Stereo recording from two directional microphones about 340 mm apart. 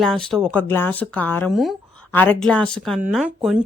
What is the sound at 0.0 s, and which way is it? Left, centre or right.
A woman's voice, centre.